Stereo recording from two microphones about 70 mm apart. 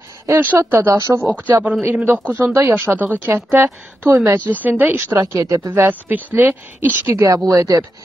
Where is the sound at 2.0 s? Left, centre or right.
Right.